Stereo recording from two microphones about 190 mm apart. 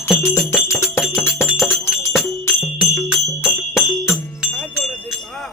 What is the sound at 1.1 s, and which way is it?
Music, 15° left (ahead or behind).